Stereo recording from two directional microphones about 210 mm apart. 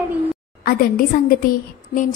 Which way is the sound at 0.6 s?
45° left (ahead or behind).